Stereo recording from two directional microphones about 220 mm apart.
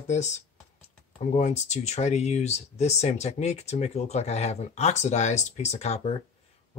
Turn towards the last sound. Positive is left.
turn(degrees=30)  # may be behind; listen again after turning